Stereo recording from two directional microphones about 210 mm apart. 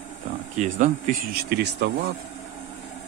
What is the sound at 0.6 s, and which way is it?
Speech, 35° right (ahead or behind).